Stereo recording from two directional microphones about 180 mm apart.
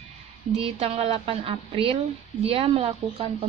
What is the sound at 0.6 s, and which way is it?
Speech, 30° right (ahead or behind).